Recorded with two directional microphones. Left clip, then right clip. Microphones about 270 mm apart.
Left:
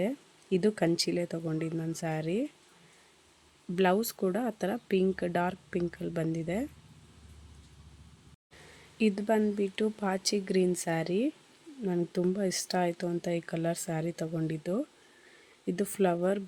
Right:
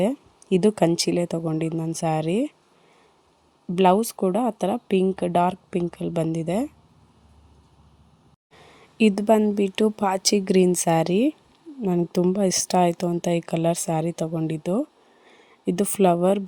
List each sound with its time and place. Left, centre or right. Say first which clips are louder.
0.5 s speech: right 8 dB; right
3.8 s speech: right 9 dB; centre
9.0 s speech: right 9 dB; right